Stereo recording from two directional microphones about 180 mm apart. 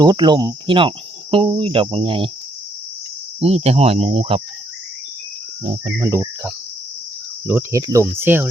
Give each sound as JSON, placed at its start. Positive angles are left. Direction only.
{"t": 0.0, "sound": "cricket", "side_deg": -25}
{"t": 3.4, "sound": "speech", "side_deg": -35}
{"t": 5.6, "sound": "speech", "side_deg": -40}
{"t": 6.0, "sound": "cricket", "side_deg": -15}